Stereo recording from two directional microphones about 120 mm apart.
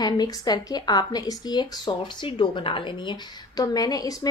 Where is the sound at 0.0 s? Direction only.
35° left (ahead or behind).